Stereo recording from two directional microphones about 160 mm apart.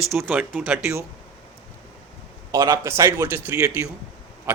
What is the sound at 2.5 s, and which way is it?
Speech, 20° right (ahead or behind).